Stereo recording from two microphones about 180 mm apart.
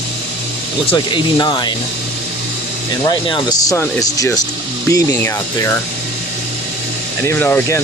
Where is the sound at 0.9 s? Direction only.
20° left (ahead or behind).